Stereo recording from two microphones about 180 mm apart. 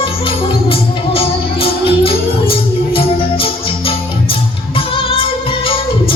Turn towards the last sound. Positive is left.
turn(degrees=30)  # may be behind; listen again after turning